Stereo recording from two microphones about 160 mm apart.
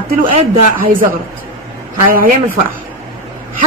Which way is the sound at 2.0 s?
60° right (ahead or behind).